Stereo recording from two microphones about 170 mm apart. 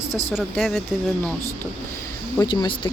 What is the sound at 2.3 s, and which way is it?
Speech, 25° left (ahead or behind).